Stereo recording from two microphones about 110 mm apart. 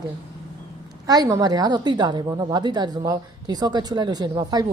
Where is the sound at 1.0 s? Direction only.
35° right (ahead or behind).